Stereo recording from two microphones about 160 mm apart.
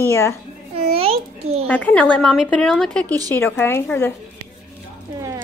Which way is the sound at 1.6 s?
10° left (ahead or behind).